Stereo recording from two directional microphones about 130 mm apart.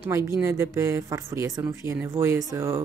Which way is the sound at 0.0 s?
20° right (ahead or behind).